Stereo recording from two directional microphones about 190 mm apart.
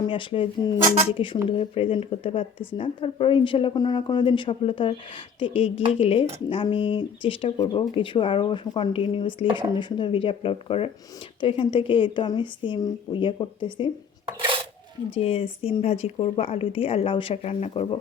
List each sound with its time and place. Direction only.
0.1 s speech: 25° left (ahead or behind)
14.3 s a sound: 25° right (ahead or behind)
15.1 s speech: 30° left (ahead or behind)